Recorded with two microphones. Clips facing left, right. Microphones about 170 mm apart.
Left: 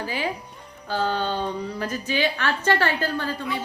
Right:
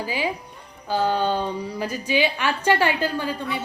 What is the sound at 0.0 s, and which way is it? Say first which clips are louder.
A woman's voice: right 2 dB; 10° right (ahead or behind).